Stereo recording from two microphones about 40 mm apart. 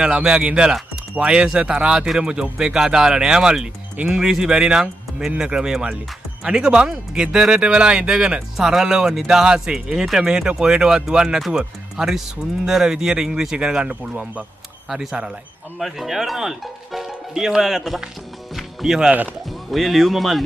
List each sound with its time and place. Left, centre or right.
0.0 s speech: right
0.4 s speech: right
11.2 s speech: centre
11.5 s speech: centre
13.8 s speech: right
14.9 s speech: centre
18.6 s music: centre
19.7 s speech: centre